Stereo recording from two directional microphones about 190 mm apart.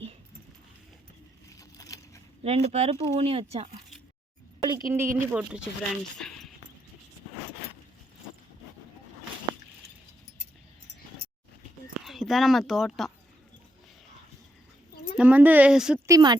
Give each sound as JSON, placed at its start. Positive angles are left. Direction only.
{"t": 1.5, "sound": "a sound", "side_deg": 15}
{"t": 2.4, "sound": "speech", "side_deg": -35}
{"t": 4.6, "sound": "a woman's voice", "side_deg": -20}
{"t": 6.1, "sound": "a sound", "side_deg": 5}
{"t": 12.0, "sound": "speech", "side_deg": 0}
{"t": 15.2, "sound": "a woman's voice", "side_deg": -10}
{"t": 16.0, "sound": "a woman's voice", "side_deg": -20}